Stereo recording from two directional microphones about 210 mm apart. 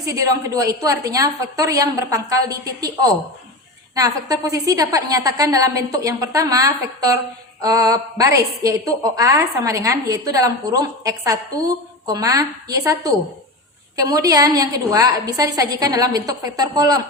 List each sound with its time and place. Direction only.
0.0 s a woman's voice: 15° right (ahead or behind)